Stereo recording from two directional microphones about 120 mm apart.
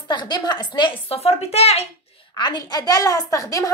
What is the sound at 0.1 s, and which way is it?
A woman's voice, 35° left (ahead or behind).